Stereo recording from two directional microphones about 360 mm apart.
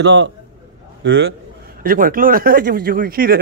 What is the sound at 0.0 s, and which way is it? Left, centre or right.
A man's voice, right.